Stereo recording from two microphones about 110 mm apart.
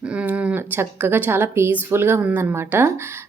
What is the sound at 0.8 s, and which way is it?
A woman's voice, 20° right (ahead or behind).